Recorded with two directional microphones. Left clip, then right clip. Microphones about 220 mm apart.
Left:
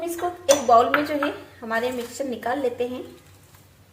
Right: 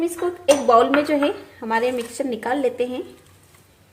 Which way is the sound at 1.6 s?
55° right (ahead or behind).